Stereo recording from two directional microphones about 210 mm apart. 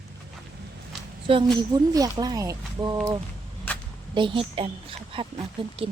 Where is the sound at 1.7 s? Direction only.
20° right (ahead or behind).